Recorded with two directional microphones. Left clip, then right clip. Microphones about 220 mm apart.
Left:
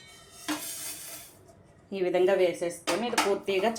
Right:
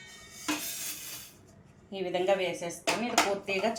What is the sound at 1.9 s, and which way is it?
Speech, 30° left (ahead or behind).